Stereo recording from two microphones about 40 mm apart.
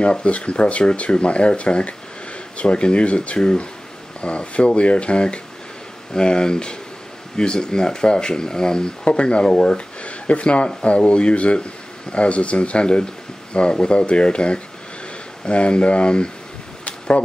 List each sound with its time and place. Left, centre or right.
0.0 s speech: left